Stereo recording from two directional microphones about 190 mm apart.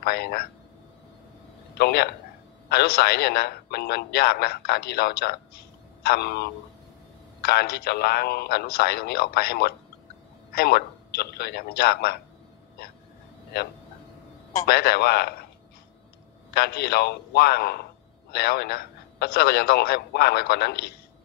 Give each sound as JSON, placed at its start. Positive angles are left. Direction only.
{"t": 0.0, "sound": "a man's voice", "side_deg": 55}
{"t": 1.8, "sound": "a man's voice", "side_deg": 60}
{"t": 14.7, "sound": "a man's voice", "side_deg": 55}
{"t": 16.4, "sound": "a man's voice", "side_deg": 55}